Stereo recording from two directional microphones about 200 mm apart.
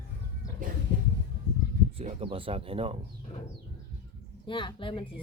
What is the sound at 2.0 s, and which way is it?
Speech, 25° right (ahead or behind).